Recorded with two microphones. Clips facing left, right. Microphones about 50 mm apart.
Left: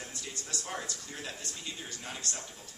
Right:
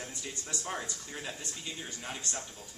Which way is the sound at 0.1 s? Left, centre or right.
Right.